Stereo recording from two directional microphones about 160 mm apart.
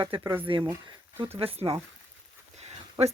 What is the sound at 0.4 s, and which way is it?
Speech, 30° right (ahead or behind).